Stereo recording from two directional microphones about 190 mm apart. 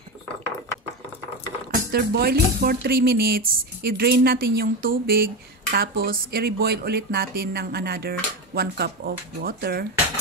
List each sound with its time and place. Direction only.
1.9 s speech: 55° right (ahead or behind)